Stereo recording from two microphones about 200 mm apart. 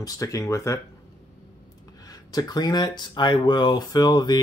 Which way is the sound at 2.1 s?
20° left (ahead or behind).